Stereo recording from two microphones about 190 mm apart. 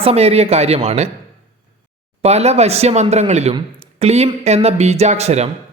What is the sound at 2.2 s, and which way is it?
Speech, 35° right (ahead or behind).